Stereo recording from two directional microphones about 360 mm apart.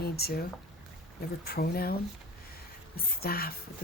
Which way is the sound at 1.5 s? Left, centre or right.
Left.